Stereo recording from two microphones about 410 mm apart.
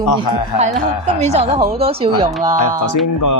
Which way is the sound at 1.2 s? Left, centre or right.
Centre.